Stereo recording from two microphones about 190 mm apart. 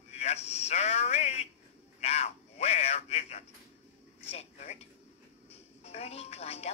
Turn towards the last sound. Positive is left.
turn(degrees=35)  # may be behind; listen again after turning